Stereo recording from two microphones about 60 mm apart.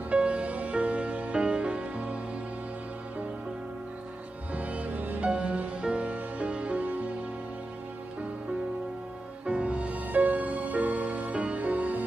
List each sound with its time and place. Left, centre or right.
0.1 s music: right
4.6 s music: right
9.5 s music: centre